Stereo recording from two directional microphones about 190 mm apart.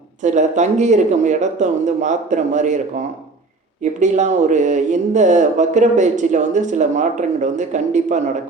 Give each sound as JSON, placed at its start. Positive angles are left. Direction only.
{"t": 0.2, "sound": "speech", "side_deg": -40}
{"t": 4.0, "sound": "speech", "side_deg": -40}